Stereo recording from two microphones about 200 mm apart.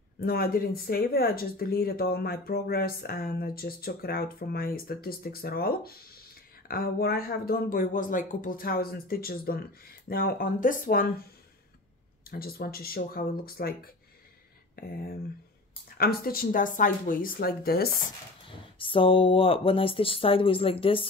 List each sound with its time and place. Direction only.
0.2 s speech: 50° left (ahead or behind)
12.3 s speech: 50° left (ahead or behind)
18.8 s speech: 25° left (ahead or behind)